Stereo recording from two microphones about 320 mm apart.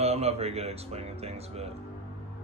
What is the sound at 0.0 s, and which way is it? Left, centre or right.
Speech, centre.